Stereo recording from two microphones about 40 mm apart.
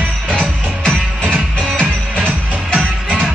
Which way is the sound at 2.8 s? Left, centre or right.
Centre.